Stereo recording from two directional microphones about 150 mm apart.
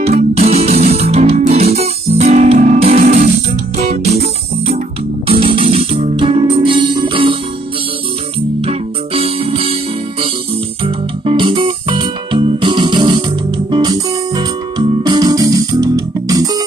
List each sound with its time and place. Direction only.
0.0 s music: 45° right (ahead or behind)
5.3 s music: 40° right (ahead or behind)
8.5 s music: 40° right (ahead or behind)
10.8 s music: 35° right (ahead or behind)